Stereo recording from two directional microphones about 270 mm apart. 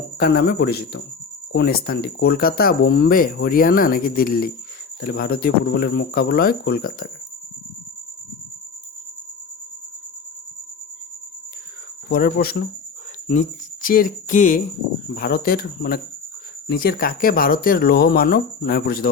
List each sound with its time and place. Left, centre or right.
0.2 s speech: left
12.1 s speech: left
13.8 s music: left
15.1 s speech: left